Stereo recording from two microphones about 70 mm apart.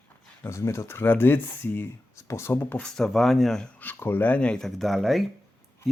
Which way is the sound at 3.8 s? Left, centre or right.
Left.